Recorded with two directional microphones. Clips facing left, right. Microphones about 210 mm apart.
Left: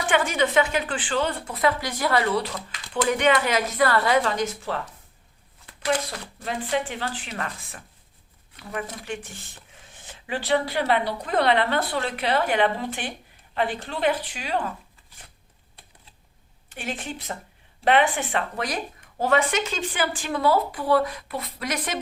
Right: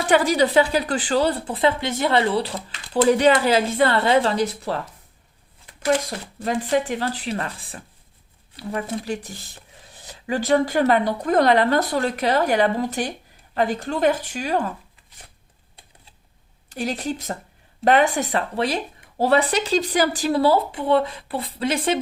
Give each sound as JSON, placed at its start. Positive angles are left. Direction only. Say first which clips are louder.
{"t": 0.1, "sound": "speech", "louder": "right 5 dB", "side_deg": -35}
{"t": 5.8, "sound": "speech", "louder": "right 4 dB", "side_deg": -45}
{"t": 16.6, "sound": "speech", "louder": "right 7 dB", "side_deg": -40}